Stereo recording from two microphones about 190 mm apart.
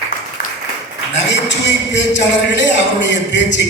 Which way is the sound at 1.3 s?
65° left (ahead or behind).